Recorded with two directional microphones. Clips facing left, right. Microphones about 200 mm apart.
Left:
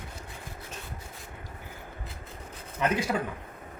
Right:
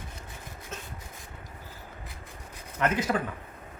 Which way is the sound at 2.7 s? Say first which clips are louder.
Right 1 dB; 10° left (ahead or behind).